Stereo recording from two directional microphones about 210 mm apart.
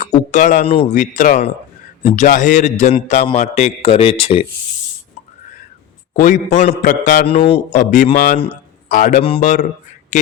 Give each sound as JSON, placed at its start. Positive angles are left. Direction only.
{"t": 0.0, "sound": "a man's voice", "side_deg": 35}
{"t": 6.1, "sound": "a man's voice", "side_deg": 40}
{"t": 7.3, "sound": "a man's voice", "side_deg": 25}